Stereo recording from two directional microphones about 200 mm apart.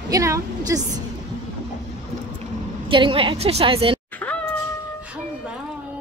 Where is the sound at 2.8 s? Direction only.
25° right (ahead or behind).